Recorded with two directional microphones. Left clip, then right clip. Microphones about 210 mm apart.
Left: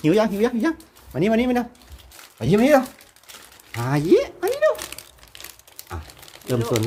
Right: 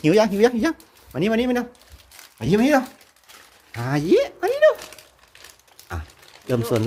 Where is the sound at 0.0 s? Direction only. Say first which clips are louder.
Right 3 dB; 15° right (ahead or behind).